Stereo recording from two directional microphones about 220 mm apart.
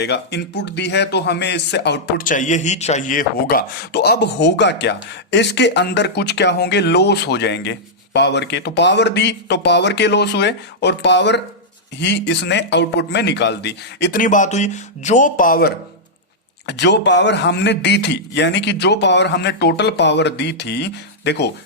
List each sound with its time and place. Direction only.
0.0 s speech: 50° left (ahead or behind)
16.6 s speech: 50° left (ahead or behind)